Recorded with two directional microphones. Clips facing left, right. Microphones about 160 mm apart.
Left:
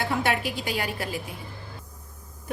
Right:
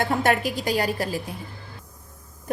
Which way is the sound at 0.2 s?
45° right (ahead or behind).